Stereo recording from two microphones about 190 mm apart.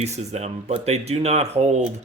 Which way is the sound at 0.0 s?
35° right (ahead or behind).